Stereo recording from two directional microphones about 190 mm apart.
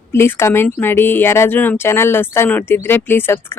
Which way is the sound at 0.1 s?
15° left (ahead or behind).